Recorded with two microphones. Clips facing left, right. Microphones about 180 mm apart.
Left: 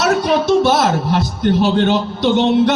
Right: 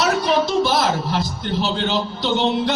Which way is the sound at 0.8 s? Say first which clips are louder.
Left 4 dB; 60° left (ahead or behind).